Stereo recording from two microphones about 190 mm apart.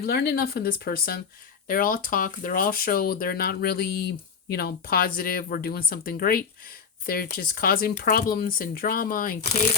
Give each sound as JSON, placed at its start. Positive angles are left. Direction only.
{"t": 0.0, "sound": "speech", "side_deg": 55}